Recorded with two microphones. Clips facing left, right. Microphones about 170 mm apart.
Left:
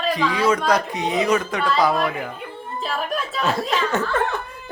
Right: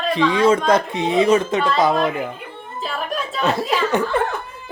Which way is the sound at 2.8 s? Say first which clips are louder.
Even; centre (ahead or behind).